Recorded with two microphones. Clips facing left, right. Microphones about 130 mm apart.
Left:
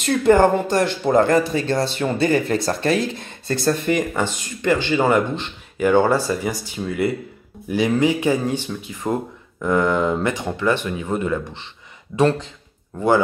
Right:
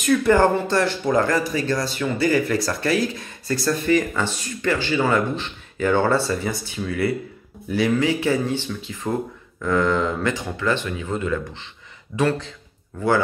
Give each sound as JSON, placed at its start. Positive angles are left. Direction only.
{"t": 0.0, "sound": "speech", "side_deg": 25}